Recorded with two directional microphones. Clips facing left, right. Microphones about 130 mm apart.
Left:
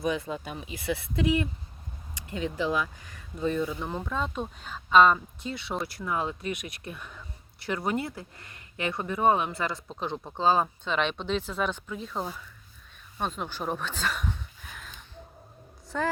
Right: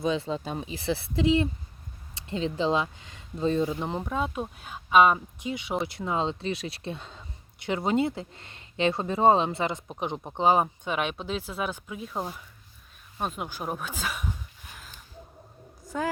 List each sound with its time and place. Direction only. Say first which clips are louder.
0.0 s speech: right 2 dB; 25° right (ahead or behind)
4.1 s speech: right 2 dB; 10° right (ahead or behind)
15.9 s speech: even; 5° right (ahead or behind)